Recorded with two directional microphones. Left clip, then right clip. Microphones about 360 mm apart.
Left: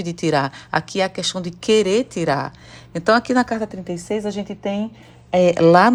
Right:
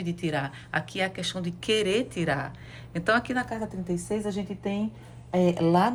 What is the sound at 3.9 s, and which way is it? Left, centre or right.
A woman's voice, left.